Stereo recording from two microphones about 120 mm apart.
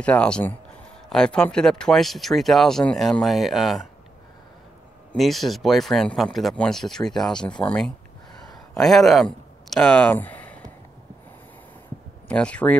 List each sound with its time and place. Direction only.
0.0 s speech: 10° left (ahead or behind)
5.1 s speech: centre (ahead or behind)
12.3 s speech: 10° left (ahead or behind)